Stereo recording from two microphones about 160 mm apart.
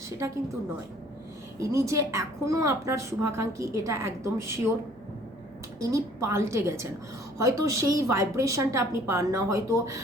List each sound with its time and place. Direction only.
1.5 s a woman's voice: 20° right (ahead or behind)
5.8 s a woman's voice: 20° right (ahead or behind)